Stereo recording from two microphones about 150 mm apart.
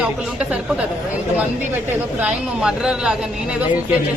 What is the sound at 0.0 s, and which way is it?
Speech, 5° right (ahead or behind).